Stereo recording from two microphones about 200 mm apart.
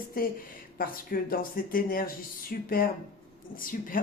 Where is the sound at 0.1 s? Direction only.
45° left (ahead or behind).